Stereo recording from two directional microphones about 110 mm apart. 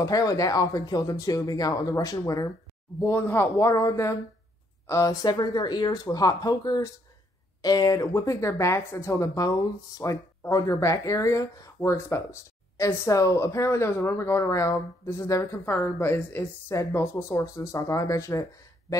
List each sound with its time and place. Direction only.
0.0 s speech: 35° left (ahead or behind)
3.0 s speech: 20° left (ahead or behind)